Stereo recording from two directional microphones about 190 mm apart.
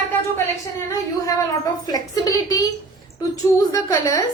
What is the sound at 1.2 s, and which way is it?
A woman's voice, 20° left (ahead or behind).